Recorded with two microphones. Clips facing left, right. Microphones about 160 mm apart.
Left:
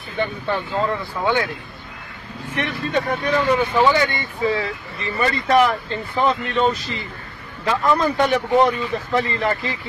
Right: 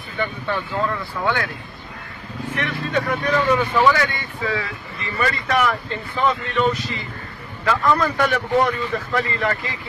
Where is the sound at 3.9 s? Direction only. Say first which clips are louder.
Even; 25° left (ahead or behind).